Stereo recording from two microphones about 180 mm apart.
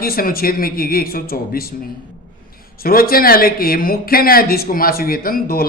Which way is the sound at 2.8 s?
55° left (ahead or behind).